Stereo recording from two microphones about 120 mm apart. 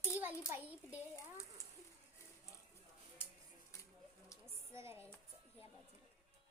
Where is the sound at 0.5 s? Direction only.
15° right (ahead or behind).